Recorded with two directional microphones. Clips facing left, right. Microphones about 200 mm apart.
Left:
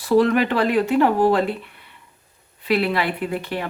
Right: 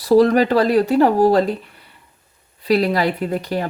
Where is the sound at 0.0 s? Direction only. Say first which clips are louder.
Right 4 dB; 35° right (ahead or behind).